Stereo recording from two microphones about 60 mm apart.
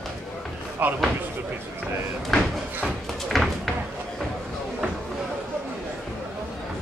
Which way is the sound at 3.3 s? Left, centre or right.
Centre.